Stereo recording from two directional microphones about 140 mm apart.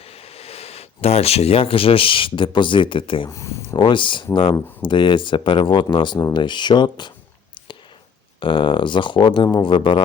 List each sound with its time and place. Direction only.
0.0 s speech: 45° left (ahead or behind)
3.2 s speech: 20° left (ahead or behind)
3.8 s speech: 35° left (ahead or behind)
8.4 s speech: 35° left (ahead or behind)